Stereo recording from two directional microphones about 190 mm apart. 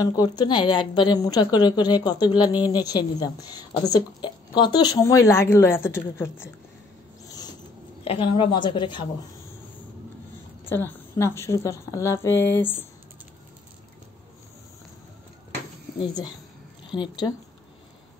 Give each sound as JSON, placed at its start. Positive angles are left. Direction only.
{"t": 0.0, "sound": "a woman's voice", "side_deg": 20}
{"t": 7.2, "sound": "a sound", "side_deg": 20}
{"t": 8.0, "sound": "a woman's voice", "side_deg": 30}
{"t": 10.6, "sound": "a woman's voice", "side_deg": 10}
{"t": 16.0, "sound": "a woman's voice", "side_deg": 20}